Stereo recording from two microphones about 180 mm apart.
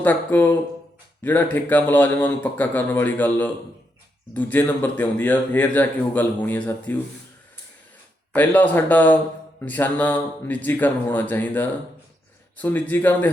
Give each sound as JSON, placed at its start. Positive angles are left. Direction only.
{"t": 0.0, "sound": "a man's voice", "side_deg": 10}
{"t": 8.3, "sound": "a man's voice", "side_deg": 10}